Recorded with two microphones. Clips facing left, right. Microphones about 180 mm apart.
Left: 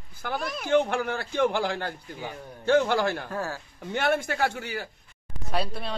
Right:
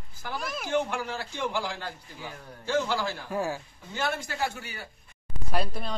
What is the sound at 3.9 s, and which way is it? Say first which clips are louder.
Speech: left 5 dB; 60° left (ahead or behind).